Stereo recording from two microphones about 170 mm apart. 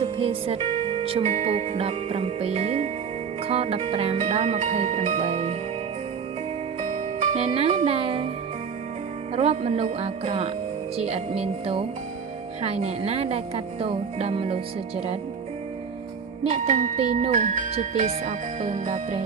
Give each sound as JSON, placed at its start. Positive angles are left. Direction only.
{"t": 0.0, "sound": "speech", "side_deg": -35}
{"t": 6.8, "sound": "music", "side_deg": -45}
{"t": 7.9, "sound": "speech", "side_deg": -35}
{"t": 9.3, "sound": "speech", "side_deg": -40}
{"t": 16.4, "sound": "speech", "side_deg": -40}